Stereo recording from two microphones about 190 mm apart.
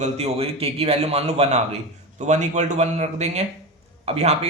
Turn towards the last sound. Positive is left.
turn(degrees=-35)  # may be behind; listen again after turning